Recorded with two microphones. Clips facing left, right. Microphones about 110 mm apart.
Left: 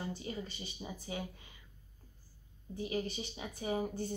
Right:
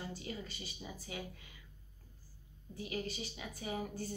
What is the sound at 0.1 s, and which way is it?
A woman's voice, 25° left (ahead or behind).